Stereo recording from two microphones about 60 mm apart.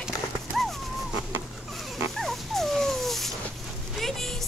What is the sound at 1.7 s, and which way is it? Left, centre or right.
Dog, centre.